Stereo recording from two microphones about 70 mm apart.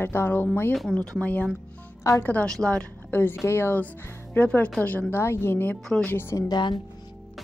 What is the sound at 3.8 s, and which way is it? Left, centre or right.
Speech, left.